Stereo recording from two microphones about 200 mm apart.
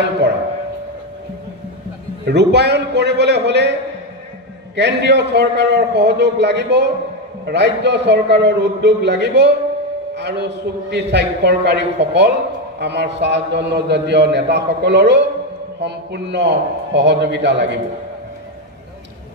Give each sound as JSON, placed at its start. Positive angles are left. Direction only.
{"t": 2.2, "sound": "a man's voice", "side_deg": -55}
{"t": 4.7, "sound": "a man's voice", "side_deg": -60}